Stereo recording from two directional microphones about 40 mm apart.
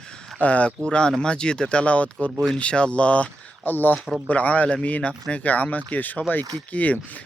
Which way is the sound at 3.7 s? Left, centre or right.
Left.